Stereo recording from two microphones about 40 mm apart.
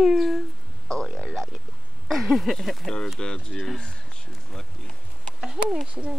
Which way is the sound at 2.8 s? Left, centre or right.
Centre.